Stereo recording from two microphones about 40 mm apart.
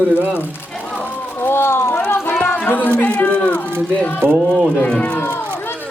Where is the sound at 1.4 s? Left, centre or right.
Left.